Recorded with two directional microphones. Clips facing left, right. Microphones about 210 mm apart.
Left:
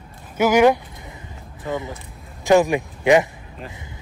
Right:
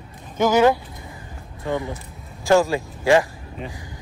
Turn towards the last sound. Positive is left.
turn(degrees=20)  # may be behind; listen again after turning